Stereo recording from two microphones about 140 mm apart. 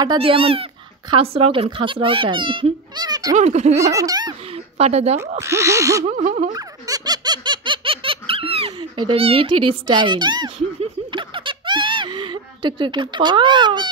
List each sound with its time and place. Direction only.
0.0 s a child's voice: 35° right (ahead or behind)
3.3 s baby laughter: 55° right (ahead or behind)
3.8 s owl: 25° right (ahead or behind)
4.5 s a sound: 45° right (ahead or behind)
5.4 s owl: 20° right (ahead or behind)
6.0 s a sound: 55° right (ahead or behind)
6.5 s giggle: 30° right (ahead or behind)